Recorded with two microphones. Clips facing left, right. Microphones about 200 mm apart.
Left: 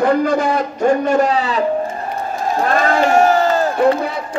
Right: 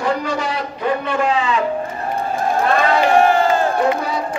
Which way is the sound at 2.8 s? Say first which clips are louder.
Left 1 dB; 45° left (ahead or behind).